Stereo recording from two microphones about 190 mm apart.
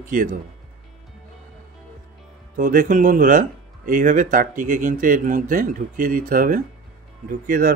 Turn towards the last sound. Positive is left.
turn(degrees=-45)  # may be behind; listen again after turning